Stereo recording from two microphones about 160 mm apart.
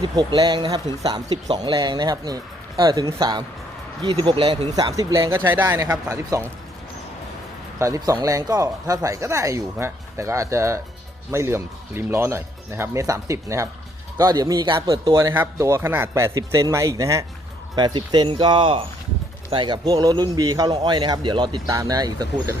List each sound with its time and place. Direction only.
0.0 s a man's voice: 25° right (ahead or behind)
4.7 s a man's voice: 25° right (ahead or behind)
7.8 s a man's voice: 20° right (ahead or behind)
15.1 s a man's voice: 15° right (ahead or behind)